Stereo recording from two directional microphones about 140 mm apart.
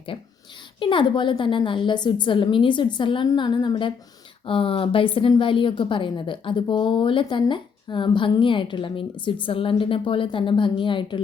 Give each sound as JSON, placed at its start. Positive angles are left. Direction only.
{"t": 0.1, "sound": "a woman's voice", "side_deg": 35}